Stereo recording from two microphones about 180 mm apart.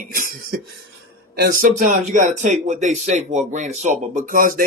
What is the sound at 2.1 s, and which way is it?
A man's voice, 45° right (ahead or behind).